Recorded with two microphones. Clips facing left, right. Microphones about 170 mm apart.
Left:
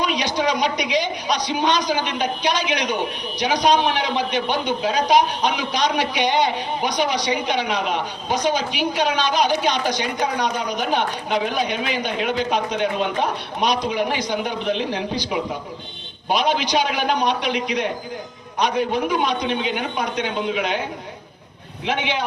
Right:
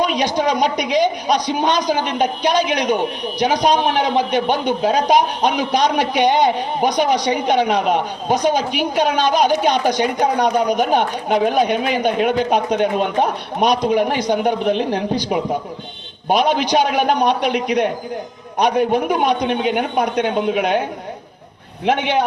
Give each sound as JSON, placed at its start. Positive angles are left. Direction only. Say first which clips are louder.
{"t": 0.0, "sound": "a woman's voice", "louder": "right 4 dB", "side_deg": -50}
{"t": 21.8, "sound": "a woman's voice", "louder": "right 6 dB", "side_deg": -55}